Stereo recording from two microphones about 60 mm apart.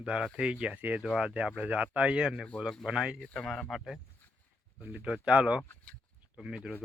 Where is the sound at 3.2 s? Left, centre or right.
Centre.